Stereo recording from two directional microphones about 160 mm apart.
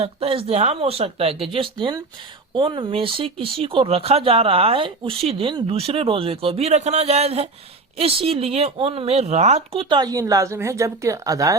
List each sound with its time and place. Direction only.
0.0 s speech: 35° right (ahead or behind)
9.9 s speech: 25° right (ahead or behind)